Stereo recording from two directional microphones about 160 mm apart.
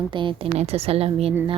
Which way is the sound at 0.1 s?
30° right (ahead or behind).